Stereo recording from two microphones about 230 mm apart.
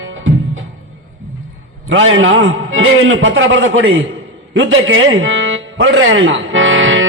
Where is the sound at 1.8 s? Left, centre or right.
Right.